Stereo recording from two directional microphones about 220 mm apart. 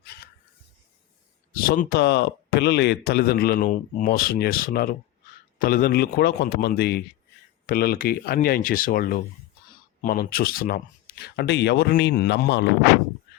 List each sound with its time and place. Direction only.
1.5 s speech: 40° left (ahead or behind)